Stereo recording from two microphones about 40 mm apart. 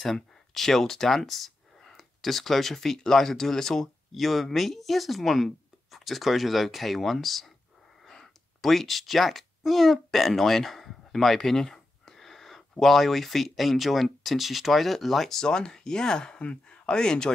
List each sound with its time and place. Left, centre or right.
0.0 s speech: centre
15.4 s speech: centre